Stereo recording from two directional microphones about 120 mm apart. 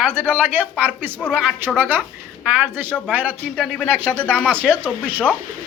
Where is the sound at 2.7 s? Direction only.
15° right (ahead or behind).